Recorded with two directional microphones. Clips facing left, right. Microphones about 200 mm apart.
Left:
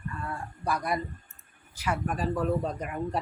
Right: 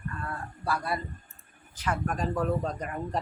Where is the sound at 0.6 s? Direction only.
20° left (ahead or behind).